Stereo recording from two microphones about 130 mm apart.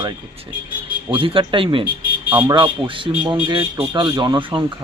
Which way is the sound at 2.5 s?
40° right (ahead or behind).